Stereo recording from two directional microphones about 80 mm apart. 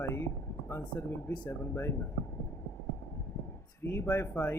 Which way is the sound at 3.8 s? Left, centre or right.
Left.